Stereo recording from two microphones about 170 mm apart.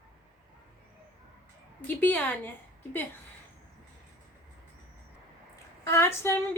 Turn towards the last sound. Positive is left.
turn(degrees=15)  # may be behind; listen again after turning